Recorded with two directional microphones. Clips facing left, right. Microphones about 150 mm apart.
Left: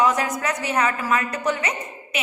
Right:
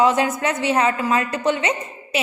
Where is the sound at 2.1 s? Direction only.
30° right (ahead or behind).